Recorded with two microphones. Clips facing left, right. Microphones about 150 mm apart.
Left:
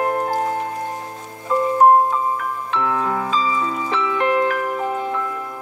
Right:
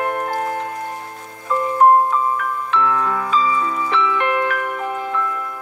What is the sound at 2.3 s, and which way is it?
Music, 20° left (ahead or behind).